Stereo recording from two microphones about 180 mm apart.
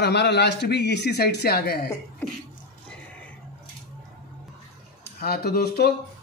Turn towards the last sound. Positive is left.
turn(degrees=60)  # may be behind; listen again after turning